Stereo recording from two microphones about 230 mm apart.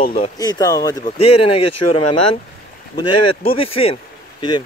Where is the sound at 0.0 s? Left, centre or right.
Left.